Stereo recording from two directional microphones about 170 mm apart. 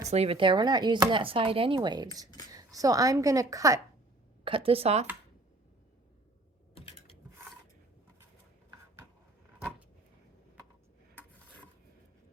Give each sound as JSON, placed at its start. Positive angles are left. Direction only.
{"t": 0.1, "sound": "speech", "side_deg": -35}
{"t": 4.4, "sound": "a woman's voice", "side_deg": -30}
{"t": 6.7, "sound": "computer keyboard", "side_deg": 35}